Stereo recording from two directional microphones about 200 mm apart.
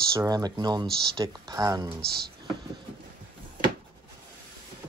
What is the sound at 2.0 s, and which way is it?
Speech, 50° right (ahead or behind).